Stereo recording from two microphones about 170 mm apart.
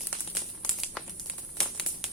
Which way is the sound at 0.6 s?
Centre (ahead or behind).